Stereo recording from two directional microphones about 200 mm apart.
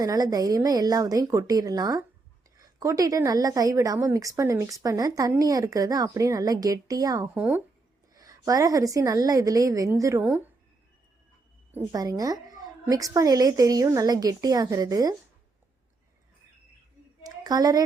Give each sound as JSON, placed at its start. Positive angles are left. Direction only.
{"t": 0.0, "sound": "a woman's voice", "side_deg": -20}
{"t": 8.1, "sound": "a woman's voice", "side_deg": -20}
{"t": 11.9, "sound": "a woman's voice", "side_deg": -20}
{"t": 17.2, "sound": "a sound", "side_deg": -20}